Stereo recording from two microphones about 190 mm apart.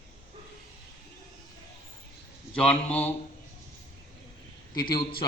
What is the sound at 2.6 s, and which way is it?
Speech, 5° left (ahead or behind).